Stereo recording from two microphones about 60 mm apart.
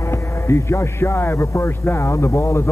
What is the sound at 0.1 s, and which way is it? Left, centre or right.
A man's voice, left.